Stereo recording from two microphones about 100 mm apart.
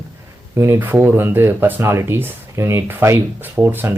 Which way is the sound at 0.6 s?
25° right (ahead or behind).